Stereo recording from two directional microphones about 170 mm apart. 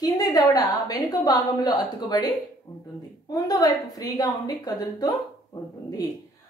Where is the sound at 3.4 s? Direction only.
20° left (ahead or behind).